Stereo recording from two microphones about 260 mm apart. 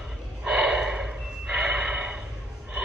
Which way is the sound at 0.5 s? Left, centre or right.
Centre.